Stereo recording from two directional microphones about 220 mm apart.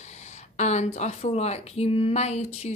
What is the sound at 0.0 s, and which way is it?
Speech, 30° left (ahead or behind).